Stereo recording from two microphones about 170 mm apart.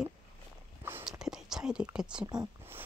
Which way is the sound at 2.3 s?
25° right (ahead or behind).